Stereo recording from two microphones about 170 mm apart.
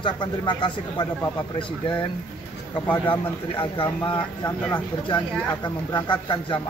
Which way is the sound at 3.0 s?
30° left (ahead or behind).